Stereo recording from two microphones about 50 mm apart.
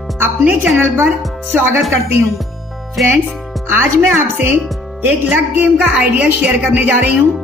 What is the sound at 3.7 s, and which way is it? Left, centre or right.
A woman's voice, right.